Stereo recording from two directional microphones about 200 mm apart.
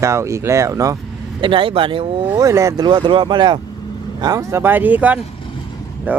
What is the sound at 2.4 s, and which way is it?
Speech, 15° right (ahead or behind).